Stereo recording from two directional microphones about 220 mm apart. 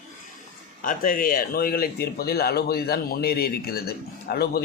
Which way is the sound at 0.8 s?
40° left (ahead or behind).